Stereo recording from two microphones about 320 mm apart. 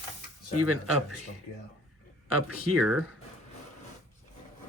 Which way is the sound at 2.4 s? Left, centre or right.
Centre.